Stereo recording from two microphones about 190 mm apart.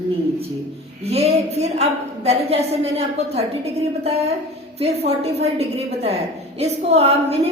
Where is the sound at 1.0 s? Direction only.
35° right (ahead or behind).